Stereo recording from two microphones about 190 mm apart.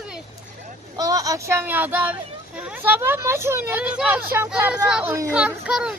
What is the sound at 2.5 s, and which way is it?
A child's voice, 10° right (ahead or behind).